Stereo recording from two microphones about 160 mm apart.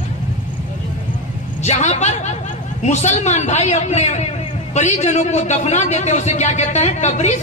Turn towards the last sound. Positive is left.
turn(degrees=45)  # may be behind; listen again after turning